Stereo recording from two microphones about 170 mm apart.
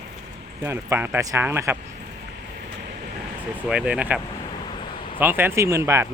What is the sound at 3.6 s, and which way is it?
Speech, 5° right (ahead or behind).